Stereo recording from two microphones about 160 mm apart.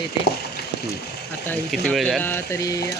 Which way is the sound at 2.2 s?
15° left (ahead or behind).